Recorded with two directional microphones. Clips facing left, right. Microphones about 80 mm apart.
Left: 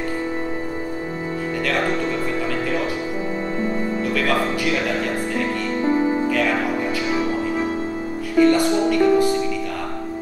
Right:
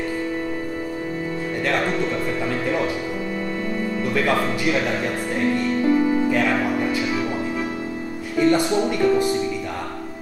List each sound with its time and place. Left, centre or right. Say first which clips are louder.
5.9 s music: even; left
8.4 s music: left 2 dB; centre